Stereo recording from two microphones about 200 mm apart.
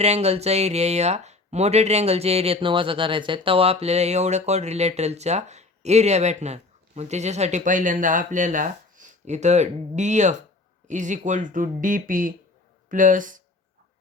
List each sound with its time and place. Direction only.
0.0 s speech: 30° right (ahead or behind)